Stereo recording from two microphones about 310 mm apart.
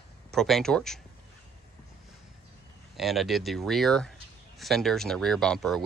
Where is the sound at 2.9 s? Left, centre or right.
Centre.